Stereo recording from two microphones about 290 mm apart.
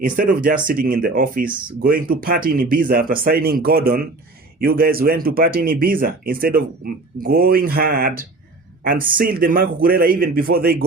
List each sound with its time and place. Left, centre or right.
0.0 s speech: right